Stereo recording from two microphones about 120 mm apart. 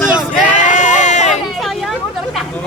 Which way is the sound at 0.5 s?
90° left.